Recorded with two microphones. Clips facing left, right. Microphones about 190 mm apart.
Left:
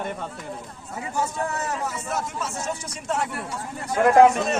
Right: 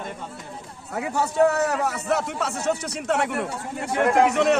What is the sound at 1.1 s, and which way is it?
Speech, 70° right (ahead or behind).